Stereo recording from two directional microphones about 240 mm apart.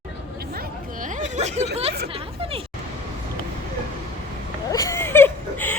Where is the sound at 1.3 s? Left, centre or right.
Right.